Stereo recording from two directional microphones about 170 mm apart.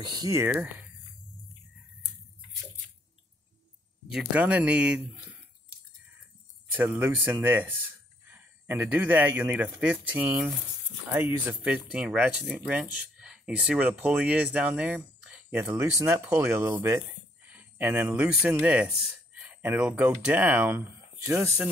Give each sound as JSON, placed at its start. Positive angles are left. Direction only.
{"t": 0.0, "sound": "speech", "side_deg": -20}
{"t": 4.1, "sound": "speech", "side_deg": -5}
{"t": 6.8, "sound": "speech", "side_deg": -10}